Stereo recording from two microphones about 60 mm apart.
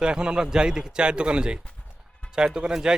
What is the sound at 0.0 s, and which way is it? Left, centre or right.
Speech, centre.